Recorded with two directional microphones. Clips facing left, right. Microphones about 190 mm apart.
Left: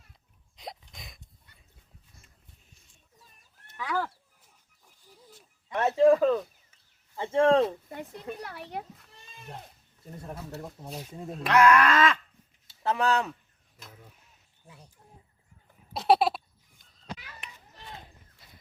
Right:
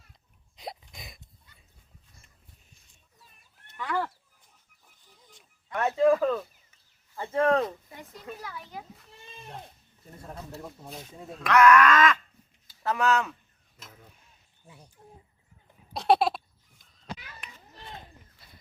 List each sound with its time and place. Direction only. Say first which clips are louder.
0.5 s a sound: right 2 dB; 5° right (ahead or behind)
1.5 s dog: even; 65° left (ahead or behind)
3.8 s chicken: right 1 dB; 5° left (ahead or behind)
5.0 s a sound: left 6 dB; 10° left (ahead or behind)
5.7 s a sound: left 2 dB; 25° left (ahead or behind)
7.2 s speech: left 3 dB; 25° left (ahead or behind)
8.4 s a child's voice: left 3 dB; 65° left (ahead or behind)
11.3 s speech: right 2 dB; 30° left (ahead or behind)
15.9 s goat: even; centre (ahead or behind)